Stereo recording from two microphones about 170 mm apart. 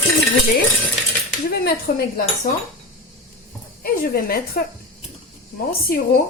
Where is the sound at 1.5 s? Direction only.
65° left (ahead or behind).